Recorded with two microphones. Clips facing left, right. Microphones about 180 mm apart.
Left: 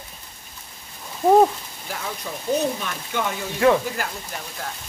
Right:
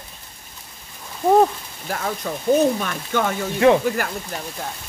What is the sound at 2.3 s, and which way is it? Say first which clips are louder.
Speech: right 6 dB; 45° right (ahead or behind).